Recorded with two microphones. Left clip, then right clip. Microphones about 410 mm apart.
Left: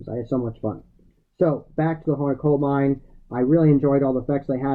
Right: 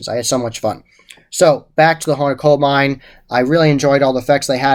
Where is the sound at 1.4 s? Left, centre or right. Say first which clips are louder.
Right 11 dB; centre.